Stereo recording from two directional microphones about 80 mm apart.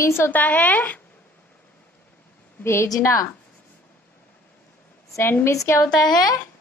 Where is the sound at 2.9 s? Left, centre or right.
Left.